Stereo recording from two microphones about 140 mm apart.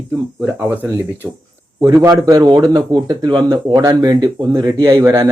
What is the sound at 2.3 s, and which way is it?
Speech, 25° right (ahead or behind).